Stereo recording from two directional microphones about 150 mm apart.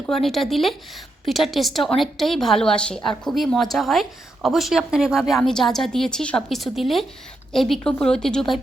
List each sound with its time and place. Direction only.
0.1 s a woman's voice: centre (ahead or behind)